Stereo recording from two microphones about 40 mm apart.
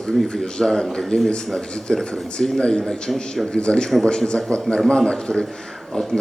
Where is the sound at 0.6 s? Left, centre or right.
Centre.